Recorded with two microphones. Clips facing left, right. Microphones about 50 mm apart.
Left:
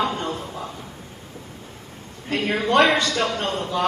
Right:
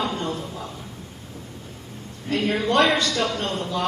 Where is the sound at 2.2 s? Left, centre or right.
Centre.